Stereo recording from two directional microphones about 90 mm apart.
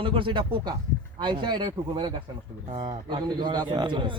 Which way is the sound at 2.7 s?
90° right.